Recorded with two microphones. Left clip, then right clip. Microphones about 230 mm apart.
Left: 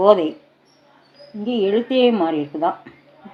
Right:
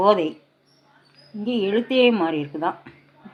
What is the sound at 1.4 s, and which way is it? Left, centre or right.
Speech, centre.